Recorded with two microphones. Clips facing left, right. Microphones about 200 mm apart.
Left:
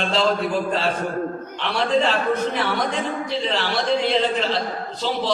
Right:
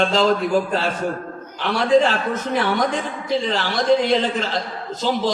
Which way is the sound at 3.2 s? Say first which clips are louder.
Right 2 dB; 45° right (ahead or behind).